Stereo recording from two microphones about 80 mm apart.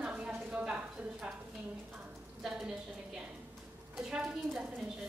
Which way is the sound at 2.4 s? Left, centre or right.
Centre.